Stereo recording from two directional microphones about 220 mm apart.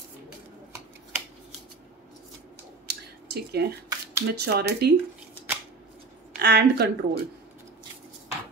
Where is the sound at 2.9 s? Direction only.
45° right (ahead or behind).